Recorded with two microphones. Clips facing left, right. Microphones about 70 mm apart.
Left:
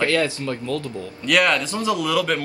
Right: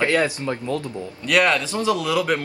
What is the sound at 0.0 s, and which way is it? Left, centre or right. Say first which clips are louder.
Speech: right 1 dB; right.